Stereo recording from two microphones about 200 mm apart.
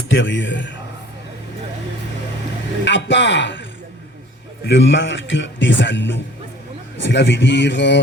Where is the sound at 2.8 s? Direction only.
65° left (ahead or behind).